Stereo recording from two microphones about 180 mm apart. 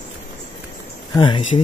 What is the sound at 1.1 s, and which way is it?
Speech, 25° left (ahead or behind).